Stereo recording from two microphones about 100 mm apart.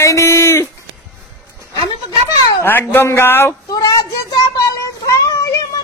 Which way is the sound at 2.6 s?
20° left (ahead or behind).